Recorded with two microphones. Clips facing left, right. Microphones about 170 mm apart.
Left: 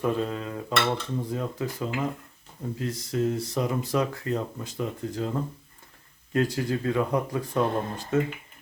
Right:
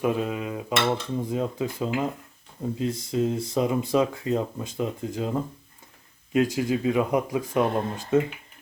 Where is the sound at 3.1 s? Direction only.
25° right (ahead or behind).